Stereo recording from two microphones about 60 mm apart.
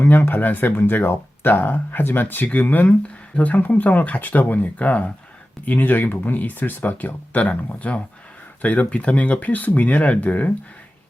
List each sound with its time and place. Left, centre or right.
0.0 s speech: left